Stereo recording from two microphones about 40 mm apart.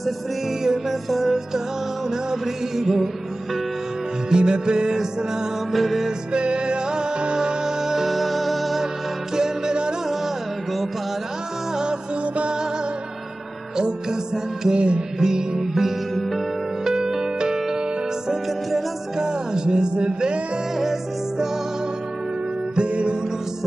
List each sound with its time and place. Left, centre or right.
0.7 s music: centre
4.3 s music: right
5.7 s music: centre
6.3 s music: right; by 8.8 s centre
9.3 s music: centre
11.7 s music: right
13.7 s music: centre
14.8 s music: right
15.1 s music: centre
16.2 s music: centre
16.8 s music: centre
19.1 s music: centre
20.7 s music: centre
22.8 s music: right